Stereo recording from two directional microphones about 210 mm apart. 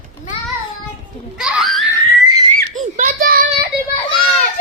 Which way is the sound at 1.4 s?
5° right (ahead or behind).